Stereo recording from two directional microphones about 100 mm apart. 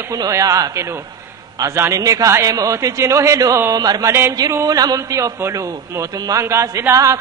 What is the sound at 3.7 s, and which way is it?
A man's voice, 40° right (ahead or behind).